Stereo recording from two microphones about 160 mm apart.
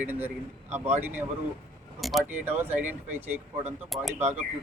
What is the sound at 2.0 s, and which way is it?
Speech, centre (ahead or behind).